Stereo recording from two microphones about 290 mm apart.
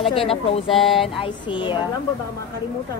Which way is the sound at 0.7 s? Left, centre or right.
Centre.